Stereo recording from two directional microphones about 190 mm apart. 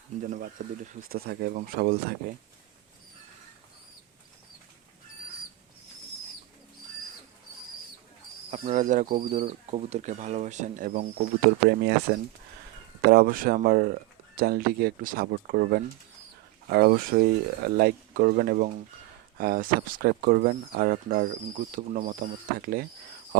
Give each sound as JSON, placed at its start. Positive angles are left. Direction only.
{"t": 0.2, "sound": "speech", "side_deg": -40}
{"t": 8.4, "sound": "speech", "side_deg": -40}